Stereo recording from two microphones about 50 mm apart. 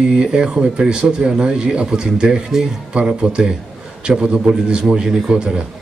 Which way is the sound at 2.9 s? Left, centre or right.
Right.